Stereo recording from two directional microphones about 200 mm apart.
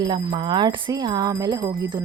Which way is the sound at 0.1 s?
20° right (ahead or behind).